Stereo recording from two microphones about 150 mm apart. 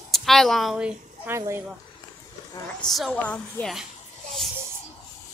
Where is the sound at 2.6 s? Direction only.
5° left (ahead or behind).